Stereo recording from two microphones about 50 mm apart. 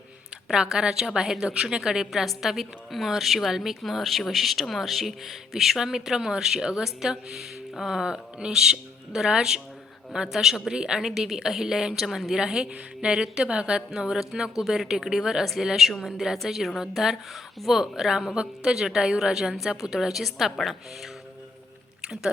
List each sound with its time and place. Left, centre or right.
0.5 s a woman's voice: centre